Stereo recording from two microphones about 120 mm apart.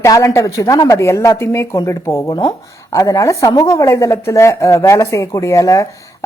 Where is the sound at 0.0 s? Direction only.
25° left (ahead or behind).